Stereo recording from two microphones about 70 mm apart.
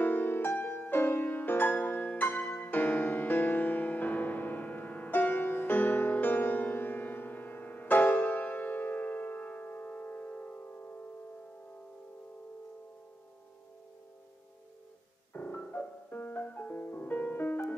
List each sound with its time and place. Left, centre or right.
0.0 s music: left
15.3 s music: left